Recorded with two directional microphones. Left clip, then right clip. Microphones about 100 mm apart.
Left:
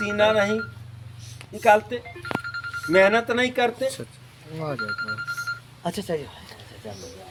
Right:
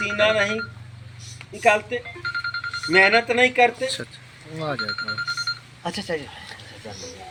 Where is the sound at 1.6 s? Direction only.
55° left (ahead or behind).